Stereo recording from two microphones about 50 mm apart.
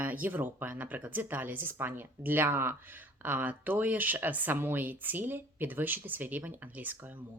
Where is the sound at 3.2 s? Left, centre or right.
Right.